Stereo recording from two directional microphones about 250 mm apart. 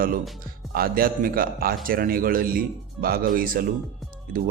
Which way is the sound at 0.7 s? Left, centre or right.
Right.